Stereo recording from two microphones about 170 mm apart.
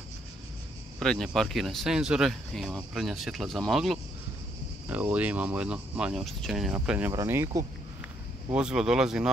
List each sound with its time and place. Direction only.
0.9 s speech: 5° left (ahead or behind); by 7.6 s 15° right (ahead or behind)
8.5 s speech: 5° right (ahead or behind)